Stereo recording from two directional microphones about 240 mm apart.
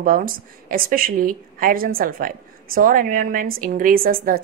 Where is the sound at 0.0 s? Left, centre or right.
Right.